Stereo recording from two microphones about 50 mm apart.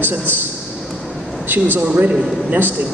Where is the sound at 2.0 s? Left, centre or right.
Right.